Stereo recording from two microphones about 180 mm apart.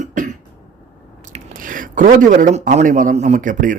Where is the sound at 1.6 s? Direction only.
50° right (ahead or behind).